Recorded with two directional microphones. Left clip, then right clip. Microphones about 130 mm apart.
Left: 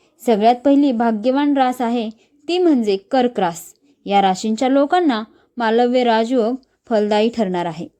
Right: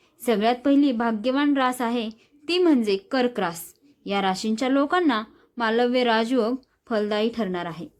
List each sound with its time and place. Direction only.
0.2 s speech: 35° left (ahead or behind)